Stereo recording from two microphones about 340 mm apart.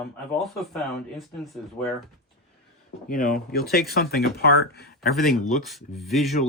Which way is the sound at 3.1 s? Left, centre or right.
Left.